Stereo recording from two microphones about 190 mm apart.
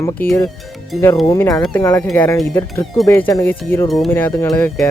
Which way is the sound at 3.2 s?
20° left (ahead or behind).